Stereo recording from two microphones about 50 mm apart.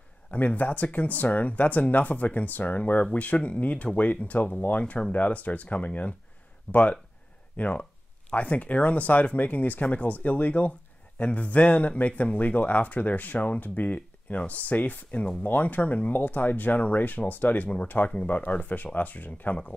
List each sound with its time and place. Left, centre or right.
0.3 s speech: left